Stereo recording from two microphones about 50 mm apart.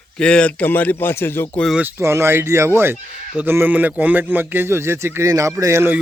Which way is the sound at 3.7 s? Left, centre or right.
Right.